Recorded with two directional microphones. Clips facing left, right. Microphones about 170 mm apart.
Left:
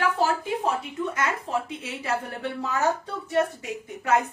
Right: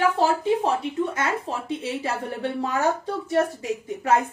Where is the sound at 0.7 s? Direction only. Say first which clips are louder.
Right 3 dB; 30° right (ahead or behind).